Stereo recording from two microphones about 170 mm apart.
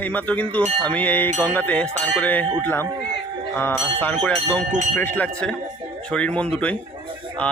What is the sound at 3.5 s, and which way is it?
A man's voice, 10° left (ahead or behind).